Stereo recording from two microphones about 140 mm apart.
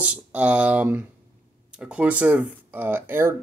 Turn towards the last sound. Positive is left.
turn(degrees=-15)  # may be behind; listen again after turning